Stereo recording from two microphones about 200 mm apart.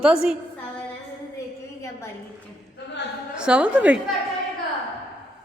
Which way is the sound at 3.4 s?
5° right (ahead or behind).